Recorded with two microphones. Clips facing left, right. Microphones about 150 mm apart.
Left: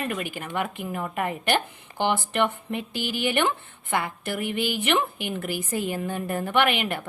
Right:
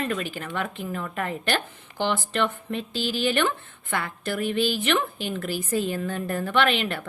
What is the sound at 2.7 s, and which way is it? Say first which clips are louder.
A woman's voice: right 1 dB; 15° left (ahead or behind).